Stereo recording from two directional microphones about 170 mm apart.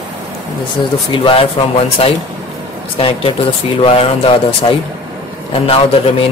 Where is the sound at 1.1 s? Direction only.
30° left (ahead or behind).